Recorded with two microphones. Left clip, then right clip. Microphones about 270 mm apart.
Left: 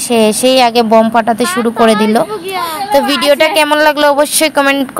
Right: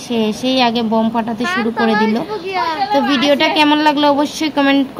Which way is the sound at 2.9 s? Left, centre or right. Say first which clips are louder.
Left 6 dB; left.